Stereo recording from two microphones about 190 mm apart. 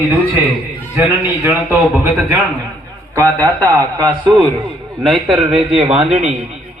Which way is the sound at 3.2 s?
15° right (ahead or behind).